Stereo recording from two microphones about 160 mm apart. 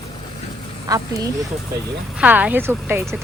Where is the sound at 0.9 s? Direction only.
20° right (ahead or behind).